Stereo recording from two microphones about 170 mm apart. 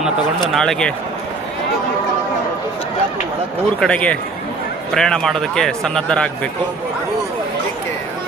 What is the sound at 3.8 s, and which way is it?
Speech, 5° left (ahead or behind).